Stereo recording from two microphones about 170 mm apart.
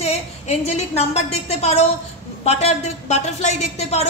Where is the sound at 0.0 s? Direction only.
40° left (ahead or behind).